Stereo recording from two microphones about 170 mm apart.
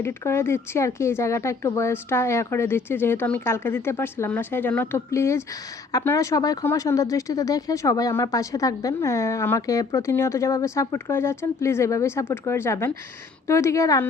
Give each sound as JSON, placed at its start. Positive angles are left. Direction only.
{"t": 0.0, "sound": "speech", "side_deg": 15}